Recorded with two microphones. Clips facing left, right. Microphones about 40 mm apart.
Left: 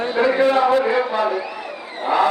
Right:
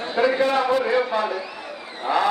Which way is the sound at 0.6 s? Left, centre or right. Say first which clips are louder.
Left 3 dB; left.